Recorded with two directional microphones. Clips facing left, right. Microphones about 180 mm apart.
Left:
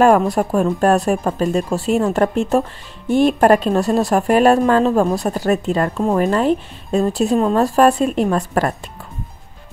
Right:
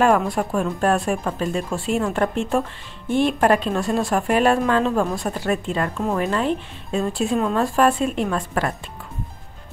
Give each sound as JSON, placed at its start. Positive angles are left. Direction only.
{"t": 0.0, "sound": "a woman's voice", "side_deg": 40}